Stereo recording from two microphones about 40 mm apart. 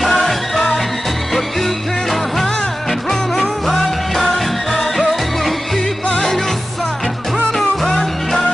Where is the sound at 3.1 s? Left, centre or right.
Centre.